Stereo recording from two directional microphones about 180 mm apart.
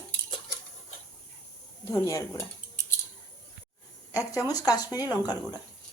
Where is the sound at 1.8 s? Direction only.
15° left (ahead or behind).